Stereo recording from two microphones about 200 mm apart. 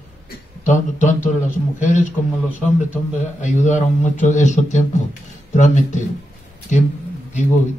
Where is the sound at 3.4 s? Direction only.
35° left (ahead or behind).